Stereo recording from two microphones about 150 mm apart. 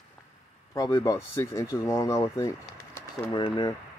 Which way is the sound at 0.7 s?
25° left (ahead or behind).